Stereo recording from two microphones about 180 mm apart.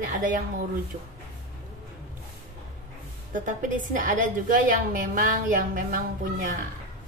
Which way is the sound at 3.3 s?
45° right (ahead or behind).